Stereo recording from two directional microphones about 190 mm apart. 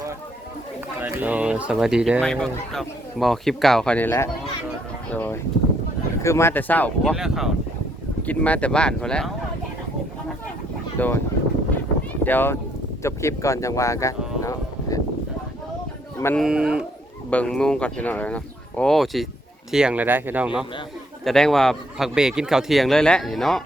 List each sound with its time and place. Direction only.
1.0 s speech: 10° right (ahead or behind)
10.9 s speech: 10° left (ahead or behind)
12.2 s speech: 10° left (ahead or behind)
16.1 s speech: 15° left (ahead or behind)
16.4 s speech: 5° right (ahead or behind)